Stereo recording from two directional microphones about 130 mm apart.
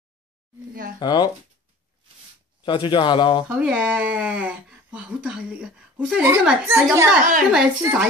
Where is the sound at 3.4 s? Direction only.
10° right (ahead or behind).